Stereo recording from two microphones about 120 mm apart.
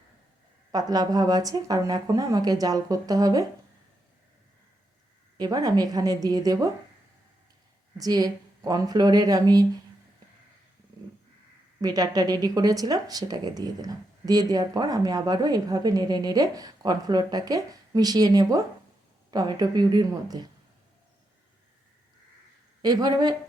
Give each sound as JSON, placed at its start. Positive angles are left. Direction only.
{"t": 0.7, "sound": "speech", "side_deg": -35}
{"t": 5.4, "sound": "speech", "side_deg": -30}
{"t": 7.9, "sound": "speech", "side_deg": -30}
{"t": 11.8, "sound": "speech", "side_deg": -30}
{"t": 22.8, "sound": "speech", "side_deg": -35}